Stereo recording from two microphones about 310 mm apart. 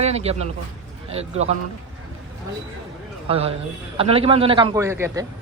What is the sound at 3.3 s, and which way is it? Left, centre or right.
A man's voice, centre.